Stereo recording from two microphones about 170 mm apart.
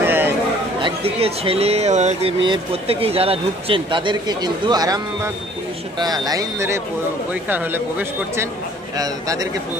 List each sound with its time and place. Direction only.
0.0 s chatter: 10° right (ahead or behind)
0.7 s a man's voice: 30° right (ahead or behind)